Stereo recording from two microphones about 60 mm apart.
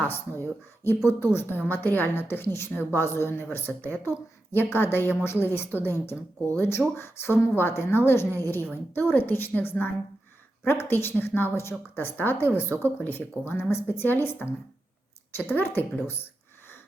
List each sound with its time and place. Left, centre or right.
1.0 s a woman's voice: left